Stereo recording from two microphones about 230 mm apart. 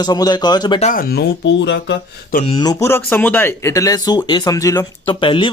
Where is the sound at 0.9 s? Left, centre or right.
Left.